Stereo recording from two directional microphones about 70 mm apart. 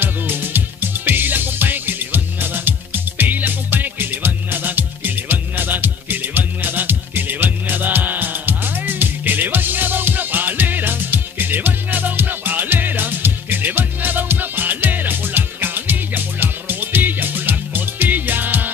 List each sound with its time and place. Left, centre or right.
0.0 s music: right